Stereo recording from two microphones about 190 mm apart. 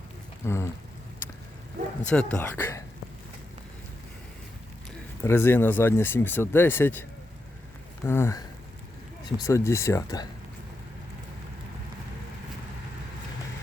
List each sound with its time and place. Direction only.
0.4 s a sound: 15° left (ahead or behind)
2.0 s speech: 5° left (ahead or behind)
5.2 s speech: 10° left (ahead or behind)
8.0 s speech: 10° left (ahead or behind)